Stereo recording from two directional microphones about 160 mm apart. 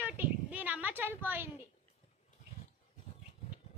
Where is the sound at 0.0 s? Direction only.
10° right (ahead or behind).